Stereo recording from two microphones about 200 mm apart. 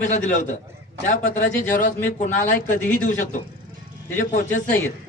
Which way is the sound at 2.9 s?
40° left (ahead or behind).